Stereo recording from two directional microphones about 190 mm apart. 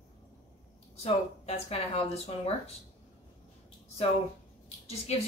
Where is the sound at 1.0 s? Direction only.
30° left (ahead or behind).